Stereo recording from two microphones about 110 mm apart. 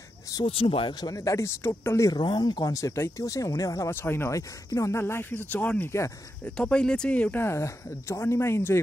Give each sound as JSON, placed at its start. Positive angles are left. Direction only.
{"t": 0.5, "sound": "speech", "side_deg": 60}
{"t": 1.1, "sound": "speech", "side_deg": 30}
{"t": 2.1, "sound": "speech", "side_deg": 45}
{"t": 3.9, "sound": "speech", "side_deg": 20}
{"t": 6.4, "sound": "speech", "side_deg": 10}